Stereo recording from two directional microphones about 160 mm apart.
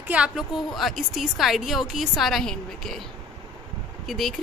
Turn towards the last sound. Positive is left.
turn(degrees=0)  # may be behind; listen again after turning